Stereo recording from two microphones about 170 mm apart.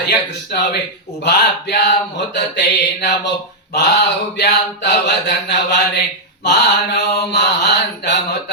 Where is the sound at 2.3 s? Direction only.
90° left.